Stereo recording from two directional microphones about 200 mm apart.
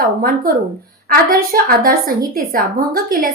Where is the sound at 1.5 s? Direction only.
45° right (ahead or behind).